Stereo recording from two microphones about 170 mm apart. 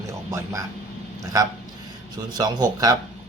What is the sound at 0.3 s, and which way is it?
A man's voice, 15° right (ahead or behind).